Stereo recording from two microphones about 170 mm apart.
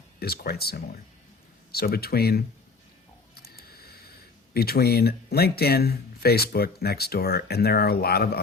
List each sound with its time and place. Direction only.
0.2 s speech: 65° left (ahead or behind)
3.3 s a sound: 65° left (ahead or behind)
4.5 s speech: 65° left (ahead or behind)